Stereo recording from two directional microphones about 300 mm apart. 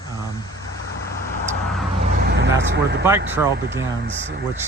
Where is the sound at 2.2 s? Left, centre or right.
Right.